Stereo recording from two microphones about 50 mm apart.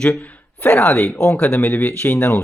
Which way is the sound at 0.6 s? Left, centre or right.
Left.